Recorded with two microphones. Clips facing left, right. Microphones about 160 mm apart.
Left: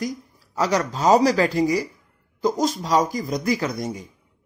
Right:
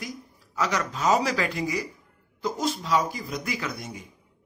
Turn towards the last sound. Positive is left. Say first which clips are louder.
# left 8 dB
turn(degrees=40)  # may be behind; listen again after turning